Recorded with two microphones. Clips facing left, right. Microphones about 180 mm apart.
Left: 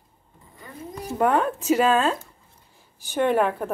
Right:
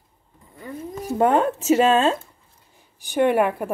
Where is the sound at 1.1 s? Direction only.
25° right (ahead or behind).